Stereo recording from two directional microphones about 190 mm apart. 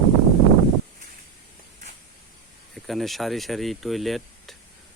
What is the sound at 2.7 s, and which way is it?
Speech, centre (ahead or behind).